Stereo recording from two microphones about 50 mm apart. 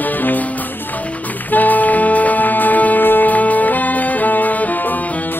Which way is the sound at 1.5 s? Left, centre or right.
Left.